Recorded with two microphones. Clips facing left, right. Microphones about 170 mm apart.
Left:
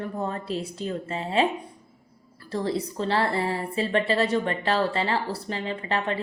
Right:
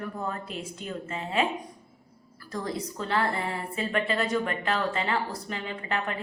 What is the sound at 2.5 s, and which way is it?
A woman's voice, 30° left (ahead or behind).